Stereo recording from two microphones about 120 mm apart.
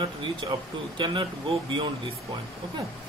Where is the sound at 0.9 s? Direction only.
40° right (ahead or behind).